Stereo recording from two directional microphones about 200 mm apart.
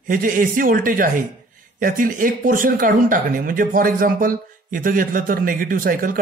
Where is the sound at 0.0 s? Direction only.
45° right (ahead or behind).